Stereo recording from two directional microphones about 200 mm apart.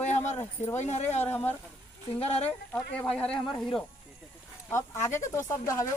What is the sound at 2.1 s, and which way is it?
Speech, 30° left (ahead or behind).